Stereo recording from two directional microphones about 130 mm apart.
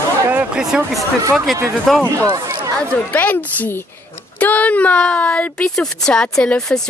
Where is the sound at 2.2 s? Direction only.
30° right (ahead or behind).